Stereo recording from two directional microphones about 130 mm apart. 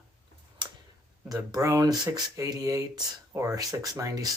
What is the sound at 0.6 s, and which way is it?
Tick-tock, 35° right (ahead or behind).